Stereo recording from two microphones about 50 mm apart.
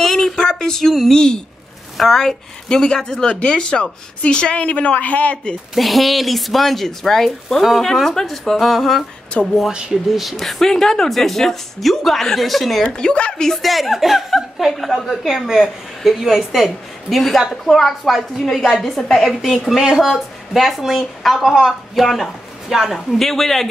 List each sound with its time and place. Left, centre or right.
0.0 s a sound: centre
2.0 s a woman's voice: centre
3.3 s a woman's voice: left
5.8 s a woman's voice: centre
9.4 s a woman's voice: left
9.7 s speech: centre
10.1 s a woman's voice: centre
12.8 s a woman's voice: centre
13.5 s a woman's voice: centre